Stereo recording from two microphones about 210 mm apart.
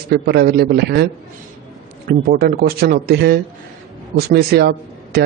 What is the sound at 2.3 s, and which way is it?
Speech, 45° right (ahead or behind).